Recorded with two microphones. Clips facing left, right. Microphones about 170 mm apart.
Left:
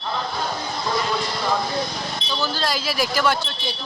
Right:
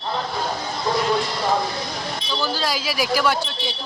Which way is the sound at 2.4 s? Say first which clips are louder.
Even; 10° right (ahead or behind).